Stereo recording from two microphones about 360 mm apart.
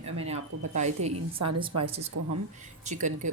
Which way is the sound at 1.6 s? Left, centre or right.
Centre.